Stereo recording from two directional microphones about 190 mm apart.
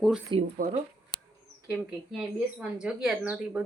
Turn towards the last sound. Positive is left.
turn(degrees=-10)  # may be behind; listen again after turning